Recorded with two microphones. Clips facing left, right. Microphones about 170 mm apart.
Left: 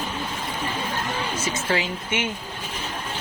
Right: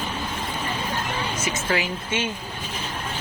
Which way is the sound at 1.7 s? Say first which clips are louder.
Even; 20° left (ahead or behind).